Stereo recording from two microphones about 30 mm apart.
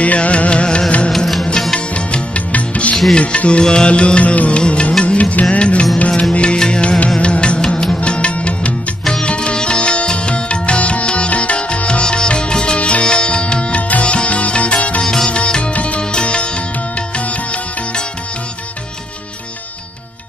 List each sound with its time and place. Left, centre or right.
0.0 s music: left
1.1 s music: centre
2.0 s music: left
2.5 s music: left
3.2 s music: left
8.0 s music: left
12.7 s music: left
13.0 s music: left
13.7 s music: left
14.0 s music: left
16.0 s music: left